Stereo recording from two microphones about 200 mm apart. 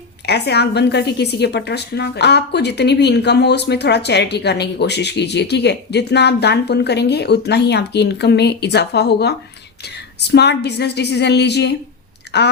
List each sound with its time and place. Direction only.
0.3 s a woman's voice: 55° left (ahead or behind)